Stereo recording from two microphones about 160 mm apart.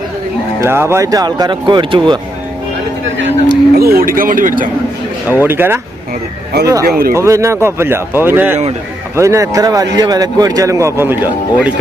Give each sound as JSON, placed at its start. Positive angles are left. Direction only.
{"t": 0.6, "sound": "a man's voice", "side_deg": -15}
{"t": 3.5, "sound": "speech", "side_deg": -75}
{"t": 5.3, "sound": "speech", "side_deg": -10}
{"t": 6.8, "sound": "speech", "side_deg": -70}
{"t": 7.1, "sound": "a man's voice", "side_deg": -20}